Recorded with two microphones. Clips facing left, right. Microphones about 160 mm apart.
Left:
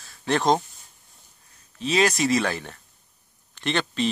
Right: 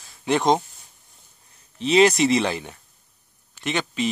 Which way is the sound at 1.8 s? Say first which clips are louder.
Right 5 dB; 25° right (ahead or behind).